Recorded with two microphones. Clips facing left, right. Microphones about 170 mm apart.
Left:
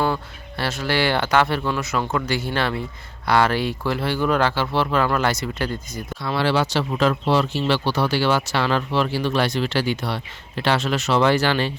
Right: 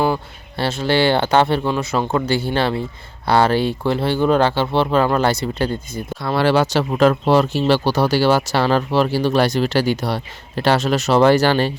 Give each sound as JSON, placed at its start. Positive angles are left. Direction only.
{"t": 0.0, "sound": "speech", "side_deg": -25}
{"t": 6.2, "sound": "speech", "side_deg": -45}